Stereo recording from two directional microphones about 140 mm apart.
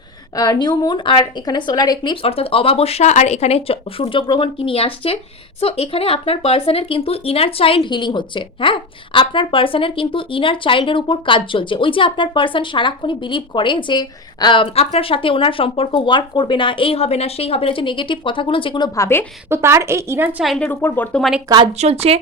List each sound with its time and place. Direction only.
0.3 s a woman's voice: 25° left (ahead or behind)
2.2 s a woman's voice: 45° left (ahead or behind)
18.9 s a woman's voice: 20° left (ahead or behind)
19.5 s a woman's voice: 20° right (ahead or behind)
20.4 s speech: centre (ahead or behind)
20.7 s a woman's voice: 15° left (ahead or behind)
21.2 s speech: centre (ahead or behind)
21.7 s speech: 50° right (ahead or behind)